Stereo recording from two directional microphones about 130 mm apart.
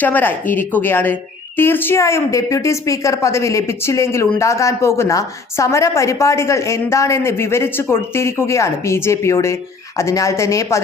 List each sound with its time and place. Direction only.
0.0 s a woman's voice: 15° left (ahead or behind)